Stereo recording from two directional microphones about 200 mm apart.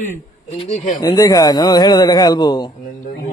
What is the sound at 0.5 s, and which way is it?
Speech, 35° left (ahead or behind).